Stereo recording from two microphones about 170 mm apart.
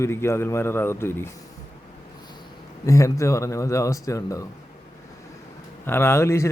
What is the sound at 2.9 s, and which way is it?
Speech, 20° left (ahead or behind).